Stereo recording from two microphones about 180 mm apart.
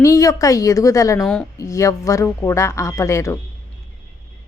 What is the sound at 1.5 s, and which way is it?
A woman's voice, 15° left (ahead or behind).